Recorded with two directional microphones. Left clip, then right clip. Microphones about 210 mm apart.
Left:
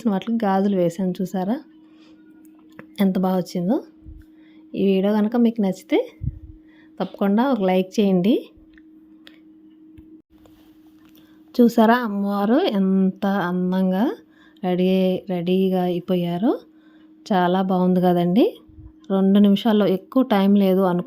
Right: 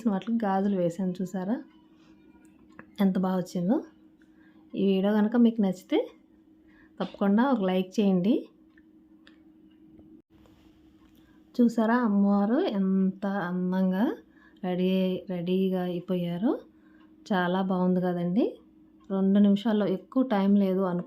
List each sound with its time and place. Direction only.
0.0 s speech: 35° left (ahead or behind)
2.7 s a woman's voice: 30° left (ahead or behind)
11.5 s speech: 40° left (ahead or behind)